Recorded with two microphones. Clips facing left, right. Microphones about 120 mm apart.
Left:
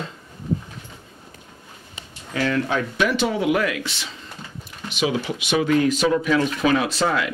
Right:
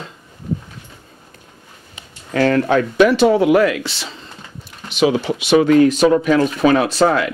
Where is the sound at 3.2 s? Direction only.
40° right (ahead or behind).